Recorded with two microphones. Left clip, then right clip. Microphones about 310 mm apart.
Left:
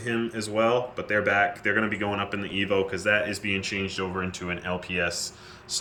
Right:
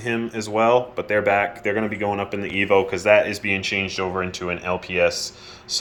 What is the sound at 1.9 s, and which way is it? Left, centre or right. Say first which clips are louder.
Speech: right 4 dB; centre.